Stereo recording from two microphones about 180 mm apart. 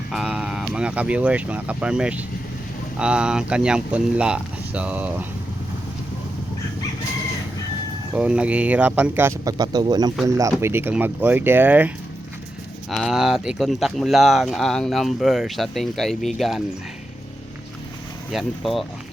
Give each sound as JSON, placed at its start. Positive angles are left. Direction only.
{"t": 0.1, "sound": "speech", "side_deg": 0}
{"t": 8.1, "sound": "speech", "side_deg": -5}
{"t": 12.9, "sound": "speech", "side_deg": 0}
{"t": 18.3, "sound": "speech", "side_deg": 0}